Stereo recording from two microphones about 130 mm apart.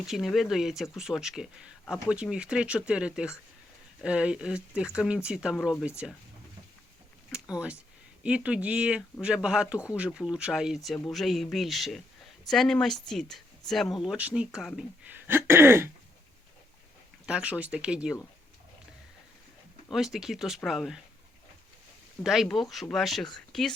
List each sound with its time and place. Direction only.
0.0 s speech: centre (ahead or behind)
7.3 s a sound: 5° right (ahead or behind)
8.2 s speech: 10° right (ahead or behind)
15.1 s throat clearing: 15° right (ahead or behind)
17.2 s speech: 10° right (ahead or behind)
19.9 s speech: centre (ahead or behind)
22.2 s speech: centre (ahead or behind)